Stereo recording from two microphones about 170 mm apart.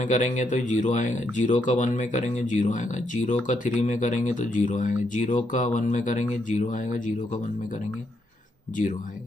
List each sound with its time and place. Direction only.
0.0 s speech: 45° left (ahead or behind)